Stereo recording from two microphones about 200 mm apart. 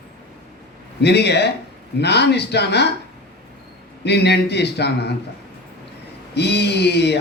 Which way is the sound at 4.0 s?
55° left (ahead or behind).